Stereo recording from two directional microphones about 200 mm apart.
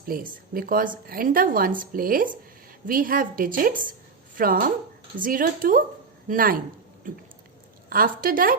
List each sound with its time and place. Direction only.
0.1 s a woman's voice: 45° right (ahead or behind)